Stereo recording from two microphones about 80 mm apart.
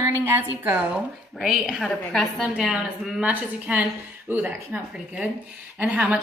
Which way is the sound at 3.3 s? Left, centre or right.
Centre.